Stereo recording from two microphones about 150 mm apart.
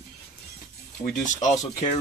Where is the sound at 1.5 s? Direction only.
50° left (ahead or behind).